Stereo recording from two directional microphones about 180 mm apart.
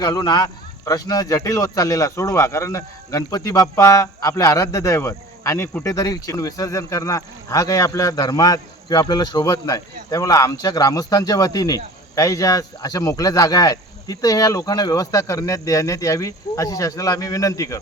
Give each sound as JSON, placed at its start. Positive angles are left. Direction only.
{"t": 0.0, "sound": "a man's voice", "side_deg": 25}